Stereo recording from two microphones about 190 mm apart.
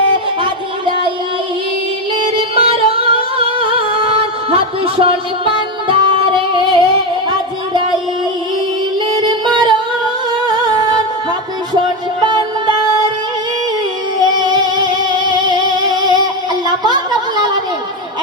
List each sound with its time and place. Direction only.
2.1 s music: 30° right (ahead or behind)
7.3 s a sound: 25° right (ahead or behind)
9.0 s music: 25° right (ahead or behind)
12.2 s music: 25° right (ahead or behind)
14.2 s music: 20° right (ahead or behind)